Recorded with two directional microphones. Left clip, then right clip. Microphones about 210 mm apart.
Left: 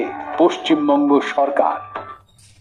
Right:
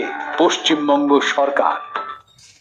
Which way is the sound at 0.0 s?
5° right (ahead or behind).